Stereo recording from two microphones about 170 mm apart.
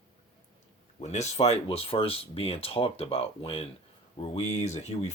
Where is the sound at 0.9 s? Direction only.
40° left (ahead or behind).